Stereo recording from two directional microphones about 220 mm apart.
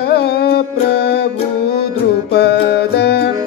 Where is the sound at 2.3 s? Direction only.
50° left (ahead or behind).